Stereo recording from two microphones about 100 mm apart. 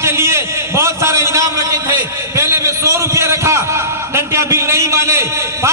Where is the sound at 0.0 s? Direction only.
25° right (ahead or behind).